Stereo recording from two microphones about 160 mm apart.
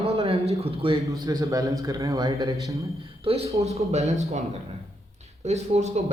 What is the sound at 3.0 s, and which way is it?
Speech, 35° right (ahead or behind).